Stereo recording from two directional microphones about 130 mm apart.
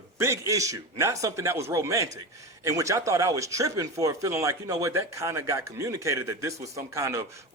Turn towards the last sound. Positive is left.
turn(degrees=-25)  # may be behind; listen again after turning